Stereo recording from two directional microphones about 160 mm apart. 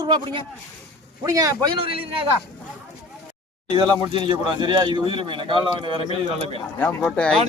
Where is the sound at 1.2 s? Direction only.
20° right (ahead or behind).